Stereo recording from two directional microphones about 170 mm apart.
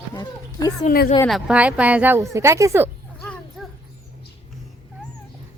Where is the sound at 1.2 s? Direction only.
5° right (ahead or behind).